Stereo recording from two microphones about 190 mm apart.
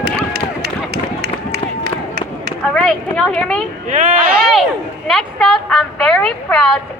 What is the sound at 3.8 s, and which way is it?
Speech, 40° right (ahead or behind).